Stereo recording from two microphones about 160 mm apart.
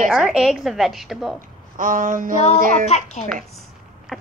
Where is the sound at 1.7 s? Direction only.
55° right (ahead or behind).